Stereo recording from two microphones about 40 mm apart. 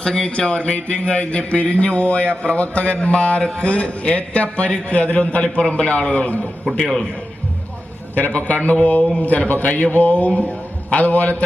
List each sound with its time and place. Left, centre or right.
0.0 s speech: centre
0.3 s speech: left
8.1 s speech: left